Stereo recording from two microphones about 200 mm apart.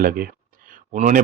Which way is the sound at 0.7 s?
40° right (ahead or behind).